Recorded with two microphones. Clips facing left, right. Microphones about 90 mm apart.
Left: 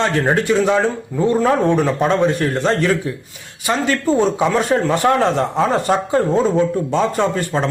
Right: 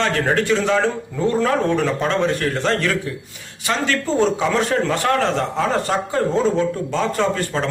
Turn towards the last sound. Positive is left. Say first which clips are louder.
# left 2 dB
turn(degrees=15)  # may be behind; listen again after turning